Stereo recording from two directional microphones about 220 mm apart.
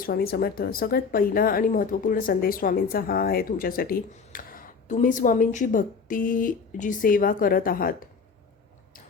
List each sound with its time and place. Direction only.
0.0 s speech: 40° left (ahead or behind)